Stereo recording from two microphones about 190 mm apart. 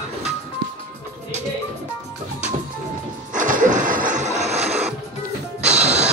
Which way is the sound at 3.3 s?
45° right (ahead or behind).